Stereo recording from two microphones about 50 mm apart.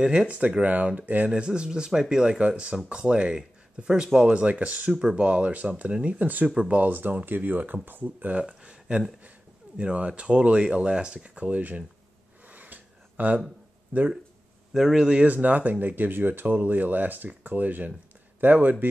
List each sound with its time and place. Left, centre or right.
0.6 s speech: right
1.3 s speech: centre
6.4 s speech: centre
6.8 s speech: right
8.4 s speech: right
12.4 s a sound: right
13.9 s speech: right
14.7 s speech: centre
15.2 s speech: right